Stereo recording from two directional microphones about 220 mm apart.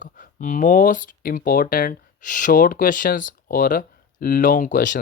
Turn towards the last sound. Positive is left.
turn(degrees=35)  # may be behind; listen again after turning